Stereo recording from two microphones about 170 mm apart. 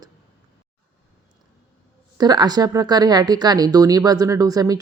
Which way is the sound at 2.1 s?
25° right (ahead or behind).